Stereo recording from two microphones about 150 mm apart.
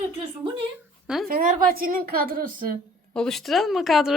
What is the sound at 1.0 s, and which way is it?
Speech, 5° right (ahead or behind).